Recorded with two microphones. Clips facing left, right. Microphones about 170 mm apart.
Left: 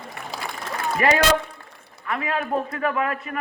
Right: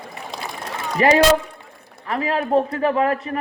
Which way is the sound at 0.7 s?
25° right (ahead or behind).